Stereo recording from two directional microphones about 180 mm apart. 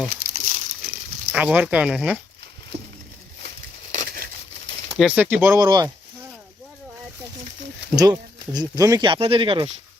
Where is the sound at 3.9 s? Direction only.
45° right (ahead or behind).